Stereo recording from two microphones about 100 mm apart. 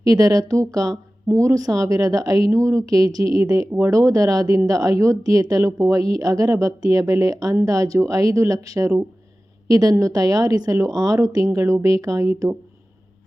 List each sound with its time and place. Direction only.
0.0 s a woman's voice: 35° right (ahead or behind)